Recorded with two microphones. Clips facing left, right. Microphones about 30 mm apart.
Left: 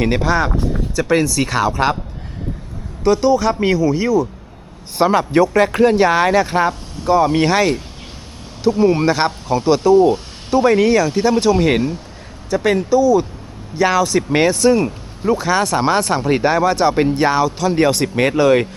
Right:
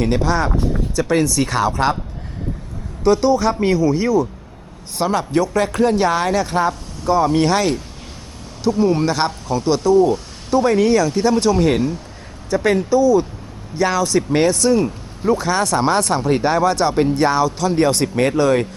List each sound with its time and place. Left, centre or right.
0.0 s speech: centre
3.0 s speech: centre
4.9 s a man's voice: left
12.5 s speech: centre